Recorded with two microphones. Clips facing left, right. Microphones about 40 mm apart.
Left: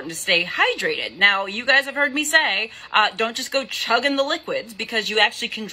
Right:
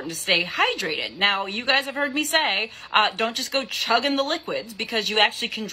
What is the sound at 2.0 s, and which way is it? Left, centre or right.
Speech, left.